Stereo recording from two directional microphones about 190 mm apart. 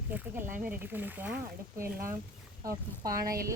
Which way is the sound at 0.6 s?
10° right (ahead or behind).